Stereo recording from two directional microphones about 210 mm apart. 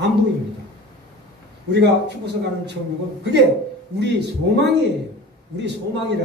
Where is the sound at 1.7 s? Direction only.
55° right (ahead or behind).